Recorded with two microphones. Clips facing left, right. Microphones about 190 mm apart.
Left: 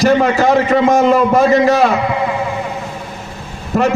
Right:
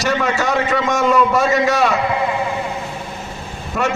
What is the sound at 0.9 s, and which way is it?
Speech, 35° left (ahead or behind).